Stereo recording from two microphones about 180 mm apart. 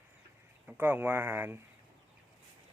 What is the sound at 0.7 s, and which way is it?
Speech, 10° right (ahead or behind).